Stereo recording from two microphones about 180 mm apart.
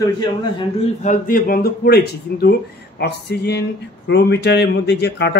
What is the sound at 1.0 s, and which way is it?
Speech, 45° left (ahead or behind).